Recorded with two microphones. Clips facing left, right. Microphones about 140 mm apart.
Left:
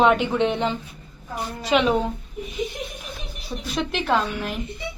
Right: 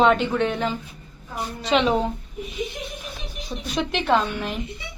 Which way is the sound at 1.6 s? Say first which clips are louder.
Even; 10° left (ahead or behind).